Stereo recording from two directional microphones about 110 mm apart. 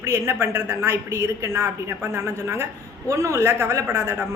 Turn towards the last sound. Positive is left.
turn(degrees=-25)  # may be behind; listen again after turning